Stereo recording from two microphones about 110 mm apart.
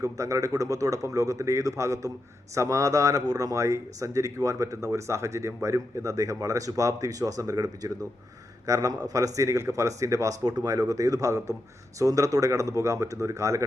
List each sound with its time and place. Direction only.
0.0 s speech: 30° right (ahead or behind)